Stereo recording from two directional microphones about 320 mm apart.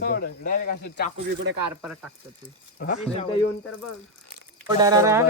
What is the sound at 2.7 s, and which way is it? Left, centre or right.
Speech, left.